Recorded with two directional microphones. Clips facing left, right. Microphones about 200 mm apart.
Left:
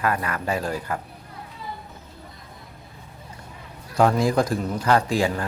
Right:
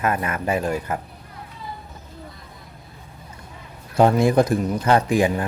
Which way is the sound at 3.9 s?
25° right (ahead or behind).